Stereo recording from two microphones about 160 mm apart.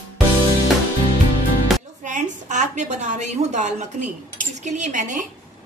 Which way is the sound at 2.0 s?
50° right (ahead or behind).